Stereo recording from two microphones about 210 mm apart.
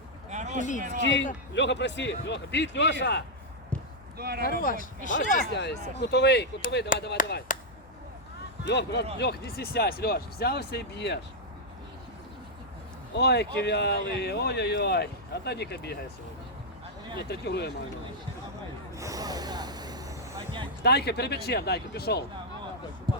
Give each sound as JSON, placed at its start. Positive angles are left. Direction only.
{"t": 0.3, "sound": "a sound", "side_deg": -35}
{"t": 0.9, "sound": "a man's voice", "side_deg": 60}
{"t": 4.2, "sound": "speech", "side_deg": -45}
{"t": 4.6, "sound": "speech", "side_deg": 40}
{"t": 5.5, "sound": "speech", "side_deg": 55}
{"t": 8.6, "sound": "a man's voice", "side_deg": 55}
{"t": 13.1, "sound": "speech", "side_deg": 55}
{"t": 17.2, "sound": "speech", "side_deg": 50}
{"t": 18.9, "sound": "gasp", "side_deg": -15}
{"t": 20.8, "sound": "speech", "side_deg": 50}